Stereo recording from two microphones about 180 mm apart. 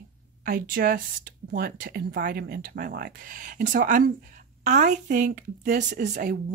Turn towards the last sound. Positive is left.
turn(degrees=-45)  # may be behind; listen again after turning